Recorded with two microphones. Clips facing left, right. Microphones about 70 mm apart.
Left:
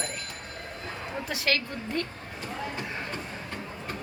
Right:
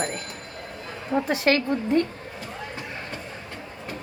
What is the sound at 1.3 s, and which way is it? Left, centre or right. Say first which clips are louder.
Speech: right 6 dB; right.